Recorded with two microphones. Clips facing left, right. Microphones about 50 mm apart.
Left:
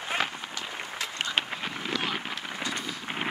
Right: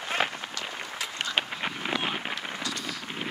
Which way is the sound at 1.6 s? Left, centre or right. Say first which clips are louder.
Right 2 dB; centre.